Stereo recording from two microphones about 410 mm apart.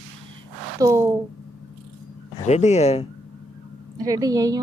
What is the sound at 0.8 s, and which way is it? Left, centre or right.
Speech, centre.